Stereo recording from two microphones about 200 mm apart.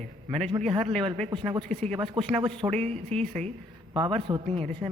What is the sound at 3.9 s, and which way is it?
Speech, 25° right (ahead or behind).